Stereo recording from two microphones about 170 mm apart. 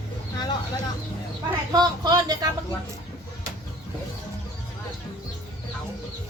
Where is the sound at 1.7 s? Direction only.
25° right (ahead or behind).